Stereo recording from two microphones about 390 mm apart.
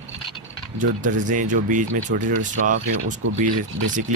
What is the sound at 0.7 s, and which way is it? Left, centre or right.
Speech, centre.